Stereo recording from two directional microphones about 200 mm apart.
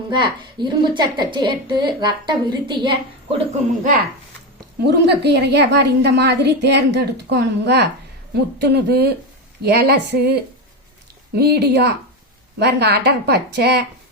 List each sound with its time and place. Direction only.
0.1 s a woman's voice: 25° right (ahead or behind)
4.9 s a woman's voice: 55° right (ahead or behind)
11.3 s a woman's voice: 55° right (ahead or behind)